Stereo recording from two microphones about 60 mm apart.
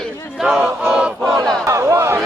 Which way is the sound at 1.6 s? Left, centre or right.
Right.